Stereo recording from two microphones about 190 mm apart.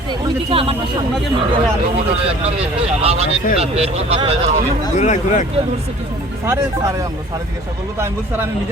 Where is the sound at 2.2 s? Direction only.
30° right (ahead or behind).